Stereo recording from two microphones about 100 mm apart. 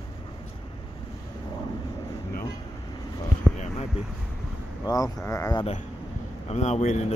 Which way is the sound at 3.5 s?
5° left (ahead or behind).